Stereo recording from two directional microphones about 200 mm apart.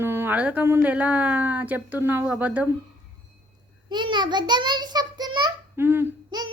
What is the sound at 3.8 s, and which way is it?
A child's voice, 20° right (ahead or behind).